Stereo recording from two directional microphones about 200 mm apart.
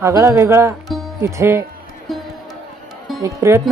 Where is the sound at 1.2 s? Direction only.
15° right (ahead or behind).